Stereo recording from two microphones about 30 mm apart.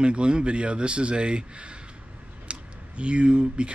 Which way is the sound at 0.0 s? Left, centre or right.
Right.